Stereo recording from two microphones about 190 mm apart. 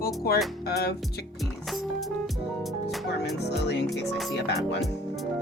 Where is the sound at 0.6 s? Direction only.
55° left (ahead or behind).